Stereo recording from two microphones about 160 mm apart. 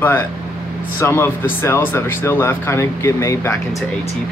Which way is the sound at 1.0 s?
15° left (ahead or behind).